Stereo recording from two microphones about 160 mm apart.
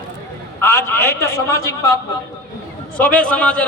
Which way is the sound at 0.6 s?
15° left (ahead or behind).